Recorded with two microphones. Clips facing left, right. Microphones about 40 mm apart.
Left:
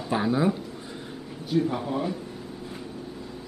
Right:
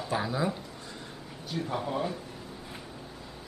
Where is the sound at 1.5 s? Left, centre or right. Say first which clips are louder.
Left 7 dB; centre.